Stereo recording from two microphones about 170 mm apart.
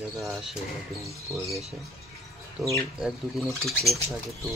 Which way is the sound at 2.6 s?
Centre (ahead or behind).